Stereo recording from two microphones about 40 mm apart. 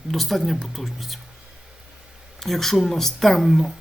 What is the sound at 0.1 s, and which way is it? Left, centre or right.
Speech, centre.